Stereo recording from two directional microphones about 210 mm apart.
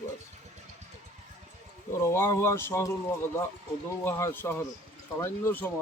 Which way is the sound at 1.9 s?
15° left (ahead or behind).